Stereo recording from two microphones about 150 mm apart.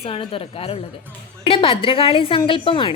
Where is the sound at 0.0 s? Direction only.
40° left (ahead or behind).